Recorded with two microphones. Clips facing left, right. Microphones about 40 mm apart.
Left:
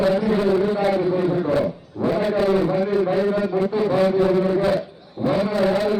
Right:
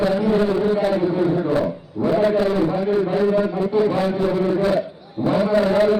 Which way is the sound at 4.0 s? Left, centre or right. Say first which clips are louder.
Left 2 dB; centre.